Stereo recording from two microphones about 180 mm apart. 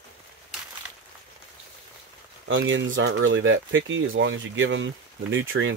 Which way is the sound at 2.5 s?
90° right.